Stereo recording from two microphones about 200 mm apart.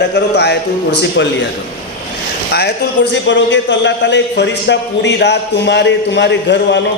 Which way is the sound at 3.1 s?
65° left (ahead or behind).